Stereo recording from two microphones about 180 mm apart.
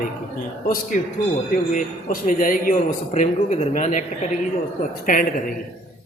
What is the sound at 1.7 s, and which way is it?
A man's voice, 50° left (ahead or behind).